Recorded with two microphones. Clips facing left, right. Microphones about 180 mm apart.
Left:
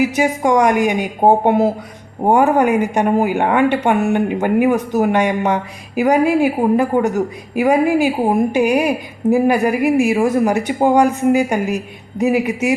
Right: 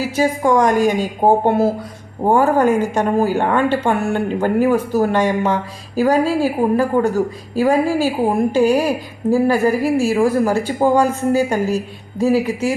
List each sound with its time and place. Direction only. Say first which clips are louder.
0.0 s a woman's voice: left 1 dB; 15° left (ahead or behind)